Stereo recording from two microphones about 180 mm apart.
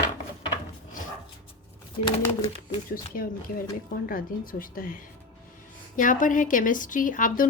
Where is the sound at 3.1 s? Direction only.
55° left (ahead or behind).